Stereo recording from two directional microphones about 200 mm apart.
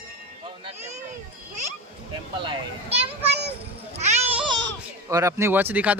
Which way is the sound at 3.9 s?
30° right (ahead or behind).